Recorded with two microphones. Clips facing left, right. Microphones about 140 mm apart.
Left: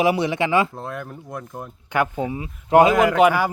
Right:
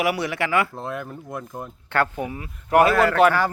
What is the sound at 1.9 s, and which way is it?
Speech, 15° left (ahead or behind).